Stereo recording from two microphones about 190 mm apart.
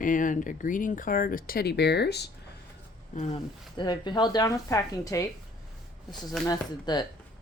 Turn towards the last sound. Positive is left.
turn(degrees=20)  # may be behind; listen again after turning